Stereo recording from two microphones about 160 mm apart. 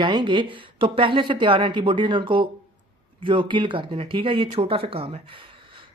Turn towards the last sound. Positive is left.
turn(degrees=-35)  # may be behind; listen again after turning